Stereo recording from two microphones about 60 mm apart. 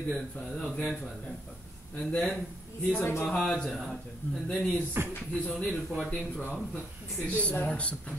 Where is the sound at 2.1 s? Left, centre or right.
Left.